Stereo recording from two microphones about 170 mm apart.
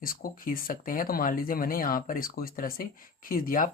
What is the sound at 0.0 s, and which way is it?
Speech, 55° left (ahead or behind).